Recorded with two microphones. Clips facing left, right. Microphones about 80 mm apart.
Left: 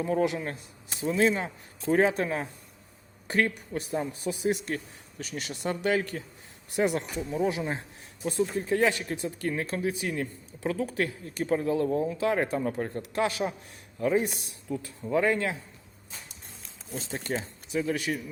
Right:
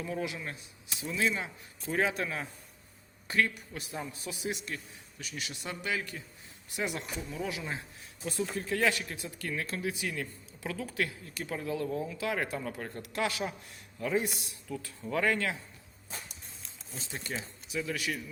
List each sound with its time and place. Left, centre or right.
0.0 s a man's voice: left
16.9 s speech: left